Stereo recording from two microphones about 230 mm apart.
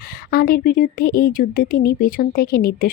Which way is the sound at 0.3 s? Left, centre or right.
Left.